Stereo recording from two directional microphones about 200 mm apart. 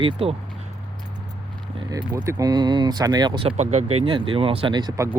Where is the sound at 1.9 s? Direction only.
15° right (ahead or behind).